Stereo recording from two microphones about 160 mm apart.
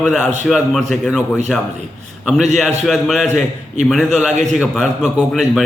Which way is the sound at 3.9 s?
Centre (ahead or behind).